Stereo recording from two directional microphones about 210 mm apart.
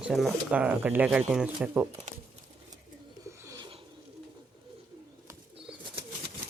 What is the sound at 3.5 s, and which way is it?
Bird, 20° right (ahead or behind).